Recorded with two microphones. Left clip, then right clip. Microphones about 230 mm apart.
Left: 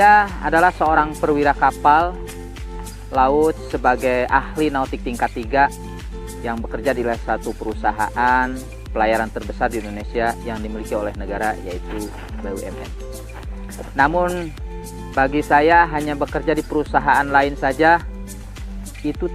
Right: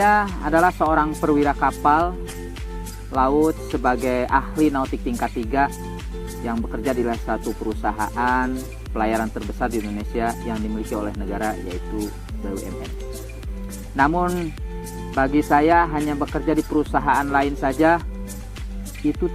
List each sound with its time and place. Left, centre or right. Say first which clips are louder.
0.0 s speech: left 5 dB; right
3.2 s speech: left 3 dB; right
9.7 s speech: even; centre
10.2 s speech: left 3 dB; right
13.9 s speech: left 3 dB; right